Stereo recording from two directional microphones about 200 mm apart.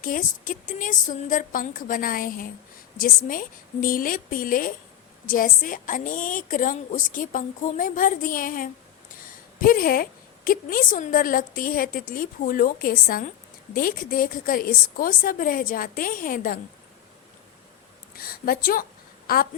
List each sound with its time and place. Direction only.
0.0 s a woman's voice: 40° left (ahead or behind)
18.2 s a woman's voice: 45° left (ahead or behind)